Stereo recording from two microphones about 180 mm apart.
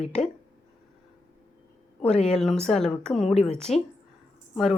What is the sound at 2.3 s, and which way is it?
A woman's voice, 5° left (ahead or behind).